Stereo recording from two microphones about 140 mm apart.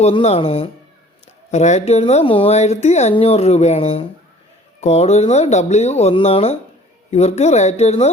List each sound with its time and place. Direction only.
0.0 s speech: 50° left (ahead or behind)
2.2 s speech: 40° left (ahead or behind)